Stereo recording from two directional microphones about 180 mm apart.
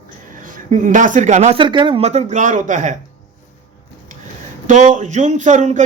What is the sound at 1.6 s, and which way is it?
Speech, 25° right (ahead or behind).